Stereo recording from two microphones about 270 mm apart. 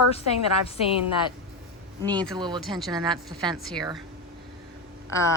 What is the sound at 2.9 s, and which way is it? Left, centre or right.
Speech, centre.